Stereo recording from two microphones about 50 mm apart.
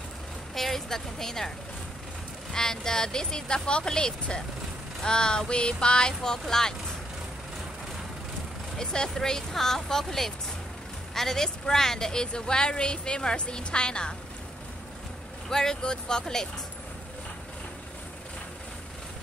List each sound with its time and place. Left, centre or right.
0.6 s a woman's voice: centre
2.5 s a woman's voice: centre
8.7 s a woman's voice: centre
15.5 s a woman's voice: centre